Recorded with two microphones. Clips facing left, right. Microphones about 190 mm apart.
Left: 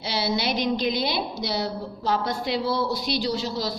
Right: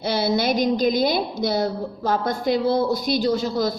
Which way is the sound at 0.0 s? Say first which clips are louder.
Right 5 dB; 50° right (ahead or behind).